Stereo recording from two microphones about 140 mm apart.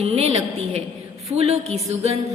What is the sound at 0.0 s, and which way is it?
A woman's voice, 45° right (ahead or behind).